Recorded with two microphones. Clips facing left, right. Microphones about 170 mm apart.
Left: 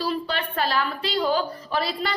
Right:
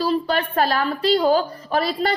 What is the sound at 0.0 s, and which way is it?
A woman's voice, 45° right (ahead or behind).